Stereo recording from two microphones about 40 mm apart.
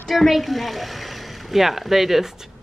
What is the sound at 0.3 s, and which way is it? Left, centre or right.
Speech, centre.